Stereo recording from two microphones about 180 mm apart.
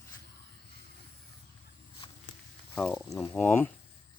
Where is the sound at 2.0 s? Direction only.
30° left (ahead or behind).